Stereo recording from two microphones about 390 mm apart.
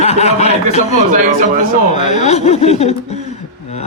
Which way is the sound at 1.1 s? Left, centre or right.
Centre.